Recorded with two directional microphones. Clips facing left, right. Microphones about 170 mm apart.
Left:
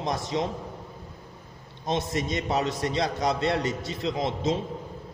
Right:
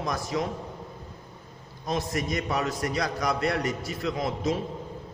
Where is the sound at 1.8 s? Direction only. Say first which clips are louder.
Left 1 dB; 25° left (ahead or behind).